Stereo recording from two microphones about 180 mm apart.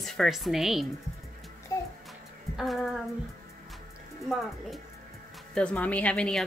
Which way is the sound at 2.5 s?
Centre (ahead or behind).